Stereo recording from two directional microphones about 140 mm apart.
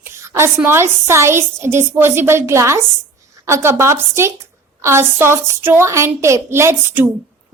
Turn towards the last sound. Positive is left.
turn(degrees=-15)  # may be behind; listen again after turning